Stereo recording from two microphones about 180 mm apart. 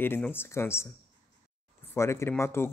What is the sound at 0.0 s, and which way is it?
Speech, 10° left (ahead or behind).